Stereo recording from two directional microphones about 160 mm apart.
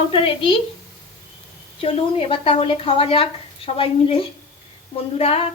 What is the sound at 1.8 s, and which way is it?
A woman's voice, 35° left (ahead or behind).